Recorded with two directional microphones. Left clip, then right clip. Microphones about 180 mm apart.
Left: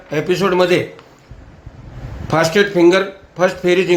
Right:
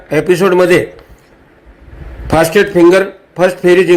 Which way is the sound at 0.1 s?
20° right (ahead or behind).